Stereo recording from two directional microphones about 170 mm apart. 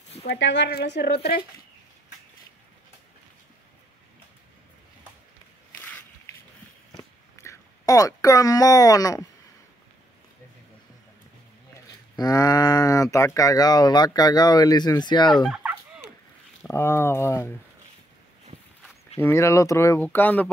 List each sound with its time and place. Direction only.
0.3 s speech: 90° left; by 1.4 s 65° left (ahead or behind)
5.8 s a sound: 10° left (ahead or behind)
7.3 s speech: 20° left (ahead or behind)
12.2 s speech: 20° left (ahead or behind)
15.3 s fowl: centre (ahead or behind)
16.6 s speech: 15° left (ahead or behind)
19.1 s speech: 15° left (ahead or behind)